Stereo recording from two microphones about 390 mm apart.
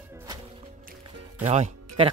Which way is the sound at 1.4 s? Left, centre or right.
Centre.